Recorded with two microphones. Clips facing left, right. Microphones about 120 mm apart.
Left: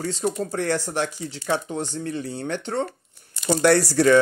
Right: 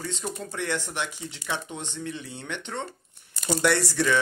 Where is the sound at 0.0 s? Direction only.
40° left (ahead or behind).